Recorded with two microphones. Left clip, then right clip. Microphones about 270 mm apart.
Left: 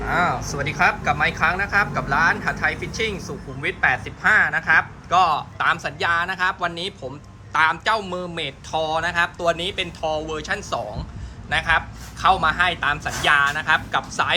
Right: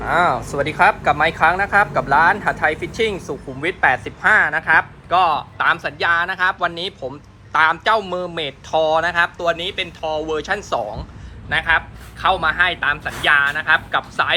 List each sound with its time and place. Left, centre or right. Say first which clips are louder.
0.0 s speech: right 4 dB; centre